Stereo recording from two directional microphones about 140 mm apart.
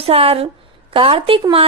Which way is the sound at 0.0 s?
45° right (ahead or behind).